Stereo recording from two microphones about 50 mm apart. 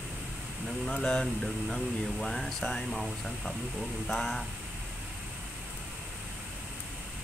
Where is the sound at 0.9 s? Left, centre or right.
Centre.